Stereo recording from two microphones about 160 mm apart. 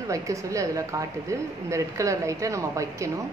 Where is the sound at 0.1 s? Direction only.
20° right (ahead or behind).